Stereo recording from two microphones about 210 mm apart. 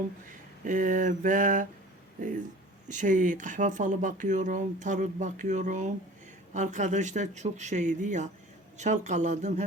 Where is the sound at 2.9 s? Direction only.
35° right (ahead or behind).